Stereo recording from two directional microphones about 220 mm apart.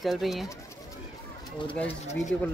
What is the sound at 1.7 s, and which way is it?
Speech, 10° left (ahead or behind).